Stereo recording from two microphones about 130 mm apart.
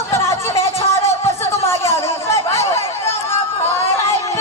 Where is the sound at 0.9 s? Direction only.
25° left (ahead or behind).